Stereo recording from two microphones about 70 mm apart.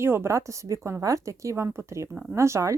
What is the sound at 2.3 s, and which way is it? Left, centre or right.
Speech, right.